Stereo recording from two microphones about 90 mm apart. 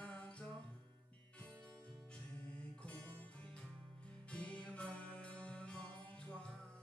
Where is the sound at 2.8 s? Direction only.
15° left (ahead or behind).